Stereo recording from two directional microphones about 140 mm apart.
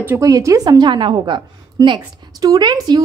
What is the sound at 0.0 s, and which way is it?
A woman's voice, 20° right (ahead or behind).